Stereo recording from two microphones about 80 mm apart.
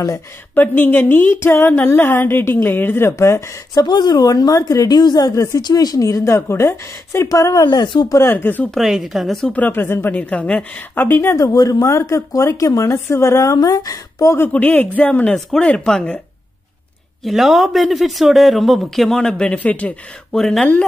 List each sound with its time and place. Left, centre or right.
0.6 s a woman's voice: left
3.8 s a woman's voice: left
5.6 s a woman's voice: left
7.6 s speech: left
8.1 s a woman's voice: left
8.7 s speech: centre
9.5 s a woman's voice: left
10.3 s speech: centre
11.0 s speech: left
14.5 s a woman's voice: centre
17.2 s speech: centre
20.3 s speech: centre